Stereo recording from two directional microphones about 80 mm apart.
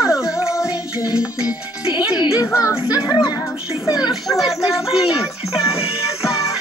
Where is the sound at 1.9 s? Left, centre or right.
Left.